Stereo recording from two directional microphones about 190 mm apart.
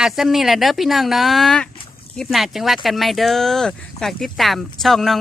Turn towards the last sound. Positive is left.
turn(degrees=0)  # may be behind; listen again after turning